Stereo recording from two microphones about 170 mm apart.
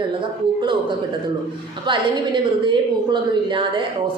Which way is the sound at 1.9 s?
30° right (ahead or behind).